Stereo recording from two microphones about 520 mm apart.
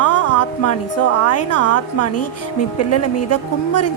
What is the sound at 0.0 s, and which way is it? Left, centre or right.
A woman's voice, left.